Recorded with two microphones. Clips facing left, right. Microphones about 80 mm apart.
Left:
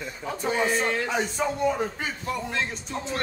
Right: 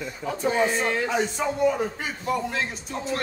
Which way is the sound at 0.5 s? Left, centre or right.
Centre.